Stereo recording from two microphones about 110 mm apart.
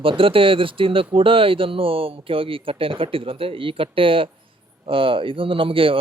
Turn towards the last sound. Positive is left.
turn(degrees=-55)  # may be behind; listen again after turning